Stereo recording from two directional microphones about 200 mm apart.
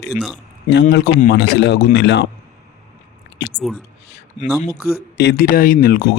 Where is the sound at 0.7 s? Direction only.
60° left (ahead or behind).